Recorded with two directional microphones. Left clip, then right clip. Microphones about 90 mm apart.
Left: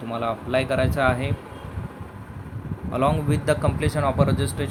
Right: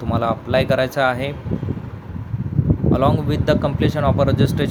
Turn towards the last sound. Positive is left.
turn(degrees=-80)